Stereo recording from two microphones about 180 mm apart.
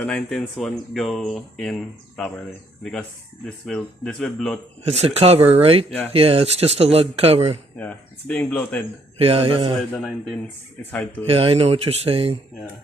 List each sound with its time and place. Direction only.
0.0 s speech: 5° left (ahead or behind)
3.4 s speech: 5° left (ahead or behind)
4.9 s speech: 35° right (ahead or behind)
7.8 s speech: 10° left (ahead or behind)
9.1 s speech: 30° right (ahead or behind)
9.9 s speech: centre (ahead or behind)
11.3 s speech: 30° right (ahead or behind)